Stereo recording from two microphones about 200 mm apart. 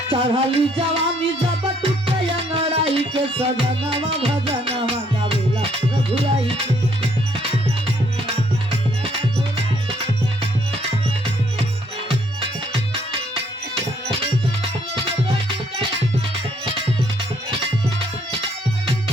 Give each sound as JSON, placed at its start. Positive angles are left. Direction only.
{"t": 0.1, "sound": "music", "side_deg": -25}
{"t": 12.0, "sound": "music", "side_deg": -25}